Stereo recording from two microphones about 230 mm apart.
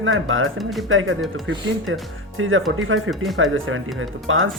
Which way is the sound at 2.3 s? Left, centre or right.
Right.